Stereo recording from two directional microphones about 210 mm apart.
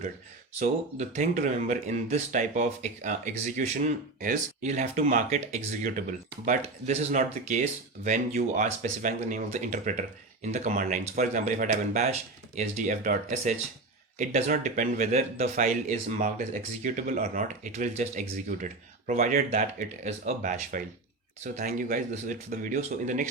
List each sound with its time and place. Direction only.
0.6 s speech: 35° right (ahead or behind)